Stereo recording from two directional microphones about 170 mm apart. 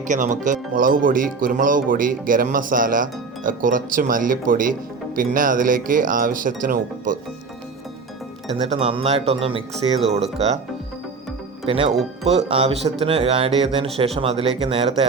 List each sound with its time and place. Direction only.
0.0 s speech: 45° right (ahead or behind)
8.5 s speech: 35° right (ahead or behind)
11.6 s speech: 35° right (ahead or behind)